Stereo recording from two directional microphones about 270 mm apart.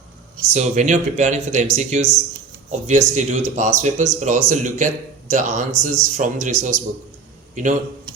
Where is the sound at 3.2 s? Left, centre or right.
Right.